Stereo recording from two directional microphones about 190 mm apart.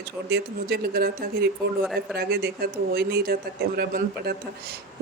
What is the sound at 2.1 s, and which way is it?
Speech, 55° right (ahead or behind).